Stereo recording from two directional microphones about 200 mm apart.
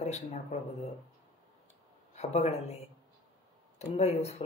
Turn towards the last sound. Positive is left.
turn(degrees=30)  # may be behind; listen again after turning